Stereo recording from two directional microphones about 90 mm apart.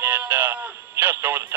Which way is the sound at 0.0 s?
20° right (ahead or behind).